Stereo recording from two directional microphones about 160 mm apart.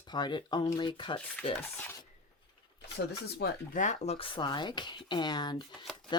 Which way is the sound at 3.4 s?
90° left.